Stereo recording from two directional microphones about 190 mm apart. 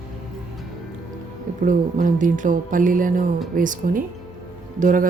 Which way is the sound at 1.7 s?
45° right (ahead or behind).